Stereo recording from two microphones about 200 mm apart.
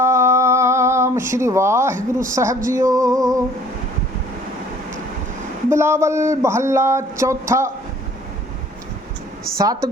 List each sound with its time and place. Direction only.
0.0 s humming: 15° right (ahead or behind)
2.3 s speech: 15° right (ahead or behind)
5.6 s speech: 10° right (ahead or behind)
9.6 s speech: 15° right (ahead or behind)